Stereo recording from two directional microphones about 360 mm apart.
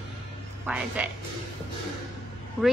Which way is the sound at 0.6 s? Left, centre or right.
Centre.